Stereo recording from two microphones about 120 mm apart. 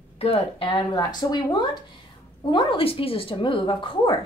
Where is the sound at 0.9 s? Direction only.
35° left (ahead or behind).